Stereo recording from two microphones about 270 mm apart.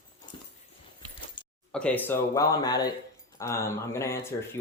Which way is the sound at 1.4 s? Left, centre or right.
Centre.